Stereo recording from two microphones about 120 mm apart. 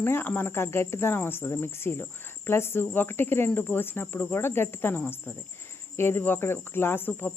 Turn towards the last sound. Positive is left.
turn(degrees=15)  # may be behind; listen again after turning